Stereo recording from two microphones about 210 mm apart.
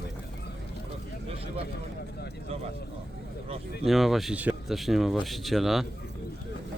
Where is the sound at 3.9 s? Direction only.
Centre (ahead or behind).